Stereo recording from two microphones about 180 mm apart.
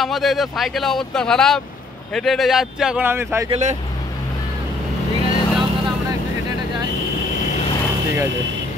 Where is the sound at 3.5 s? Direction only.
40° right (ahead or behind).